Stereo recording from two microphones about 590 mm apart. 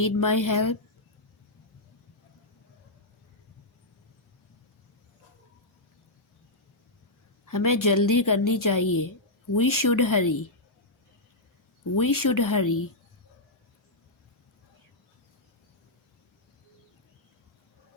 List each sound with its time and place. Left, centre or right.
0.0 s a woman's voice: left
7.4 s a woman's voice: left
11.9 s a woman's voice: left